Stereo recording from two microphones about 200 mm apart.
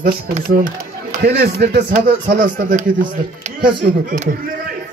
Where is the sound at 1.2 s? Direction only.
55° right (ahead or behind).